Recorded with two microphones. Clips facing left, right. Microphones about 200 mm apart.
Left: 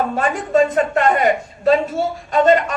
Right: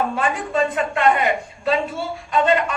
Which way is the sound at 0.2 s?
40° left (ahead or behind).